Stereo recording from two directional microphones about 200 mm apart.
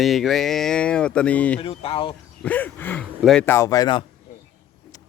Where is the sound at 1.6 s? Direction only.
30° left (ahead or behind).